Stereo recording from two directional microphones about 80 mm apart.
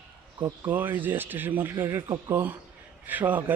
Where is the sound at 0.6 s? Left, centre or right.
Right.